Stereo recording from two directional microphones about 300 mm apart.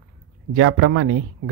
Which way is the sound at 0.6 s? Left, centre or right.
Right.